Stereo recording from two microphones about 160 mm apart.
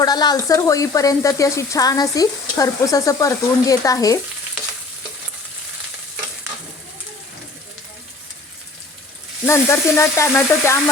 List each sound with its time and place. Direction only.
0.0 s frying: 25° left (ahead or behind)
9.5 s frying: 15° left (ahead or behind)